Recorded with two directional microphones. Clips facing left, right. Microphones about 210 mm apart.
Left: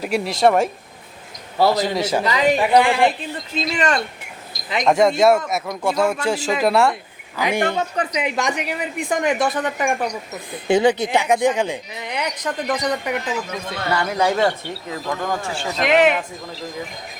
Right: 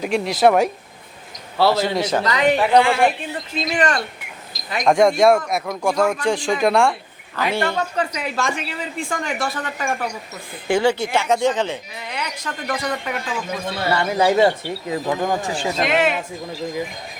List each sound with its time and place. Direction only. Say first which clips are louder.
0.0 s speech: right 1 dB; centre (ahead or behind)
1.5 s a man's voice: even; 15° left (ahead or behind)
4.9 s speech: right 1 dB; 5° left (ahead or behind)
7.3 s a man's voice: left 1 dB; 15° left (ahead or behind)
13.8 s speech: right 2 dB; 5° right (ahead or behind)
14.9 s speech: right 3 dB; 15° right (ahead or behind)
15.9 s a man's voice: left 5 dB; 15° left (ahead or behind)